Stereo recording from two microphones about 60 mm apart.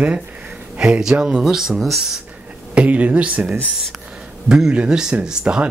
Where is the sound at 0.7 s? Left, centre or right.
Centre.